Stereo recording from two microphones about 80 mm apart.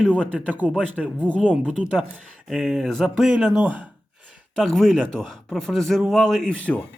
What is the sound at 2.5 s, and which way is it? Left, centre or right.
Speech, centre.